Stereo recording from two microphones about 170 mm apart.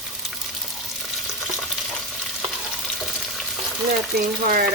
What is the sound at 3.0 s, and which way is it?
Frying, centre (ahead or behind).